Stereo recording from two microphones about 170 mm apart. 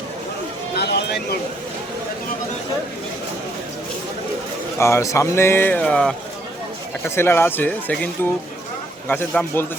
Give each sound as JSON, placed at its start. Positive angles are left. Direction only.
{"t": 0.8, "sound": "a sound", "side_deg": 75}
{"t": 4.8, "sound": "speech", "side_deg": 15}
{"t": 7.2, "sound": "speech", "side_deg": 15}